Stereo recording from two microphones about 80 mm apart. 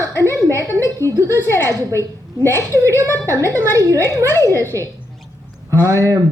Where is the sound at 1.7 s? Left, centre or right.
Right.